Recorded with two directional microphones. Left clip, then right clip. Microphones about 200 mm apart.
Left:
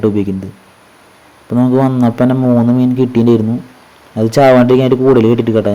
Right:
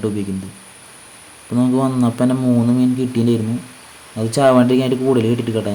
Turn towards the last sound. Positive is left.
turn(degrees=25)  # may be behind; listen again after turning